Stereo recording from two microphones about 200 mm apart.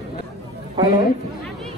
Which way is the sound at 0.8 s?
20° right (ahead or behind).